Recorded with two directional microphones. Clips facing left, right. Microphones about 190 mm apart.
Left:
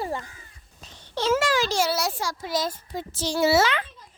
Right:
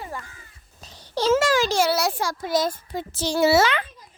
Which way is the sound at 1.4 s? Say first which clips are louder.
Right 3 dB; 45° right (ahead or behind).